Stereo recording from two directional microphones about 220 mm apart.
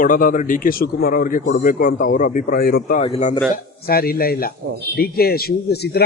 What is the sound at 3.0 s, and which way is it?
Speech, 30° left (ahead or behind).